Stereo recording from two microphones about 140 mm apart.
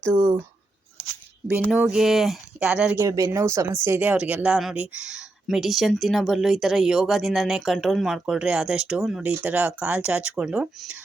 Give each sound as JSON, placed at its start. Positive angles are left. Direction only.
{"t": 0.1, "sound": "speech", "side_deg": -20}
{"t": 1.7, "sound": "speech", "side_deg": -5}
{"t": 3.0, "sound": "speech", "side_deg": -20}